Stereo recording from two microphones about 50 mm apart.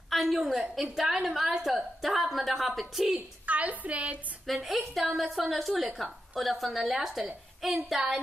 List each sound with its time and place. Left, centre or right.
0.1 s a woman's voice: centre
3.4 s a woman's voice: right
4.5 s a woman's voice: centre